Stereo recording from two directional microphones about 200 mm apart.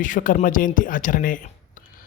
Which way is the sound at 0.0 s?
40° left (ahead or behind).